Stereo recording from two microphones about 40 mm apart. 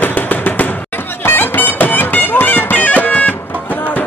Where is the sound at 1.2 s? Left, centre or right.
Left.